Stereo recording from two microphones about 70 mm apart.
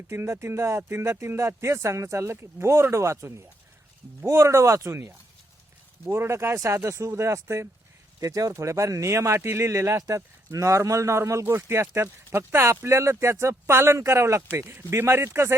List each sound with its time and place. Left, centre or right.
0.1 s speech: right
8.2 s speech: right